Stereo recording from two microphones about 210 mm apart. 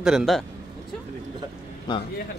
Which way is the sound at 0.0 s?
Centre (ahead or behind).